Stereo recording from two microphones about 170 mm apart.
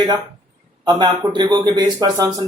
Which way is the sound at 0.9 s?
25° right (ahead or behind).